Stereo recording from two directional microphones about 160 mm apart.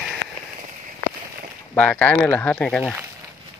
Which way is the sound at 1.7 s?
10° left (ahead or behind).